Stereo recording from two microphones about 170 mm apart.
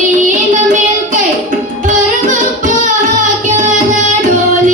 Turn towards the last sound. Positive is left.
turn(degrees=-50)  # may be behind; listen again after turning